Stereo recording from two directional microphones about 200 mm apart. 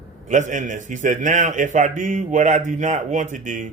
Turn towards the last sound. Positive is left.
turn(degrees=-40)  # may be behind; listen again after turning